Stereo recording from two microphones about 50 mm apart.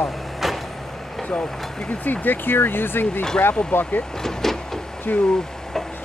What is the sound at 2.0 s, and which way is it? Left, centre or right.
Speech, left.